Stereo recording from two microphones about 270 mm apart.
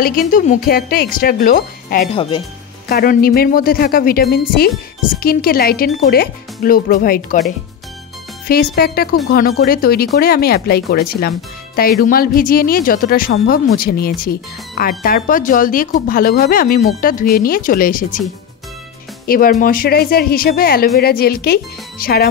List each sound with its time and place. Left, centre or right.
0.0 s speech: left
8.7 s speech: left
19.2 s speech: left